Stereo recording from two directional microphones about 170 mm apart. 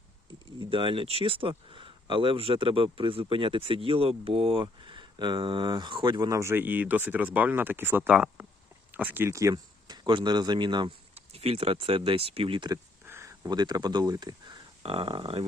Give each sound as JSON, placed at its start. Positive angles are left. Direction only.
{"t": 0.6, "sound": "speech", "side_deg": -30}
{"t": 13.1, "sound": "speech", "side_deg": -15}